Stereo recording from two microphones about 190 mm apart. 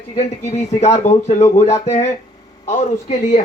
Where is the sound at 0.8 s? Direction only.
35° left (ahead or behind).